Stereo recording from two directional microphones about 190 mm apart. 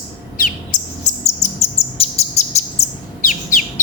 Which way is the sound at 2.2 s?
35° left (ahead or behind).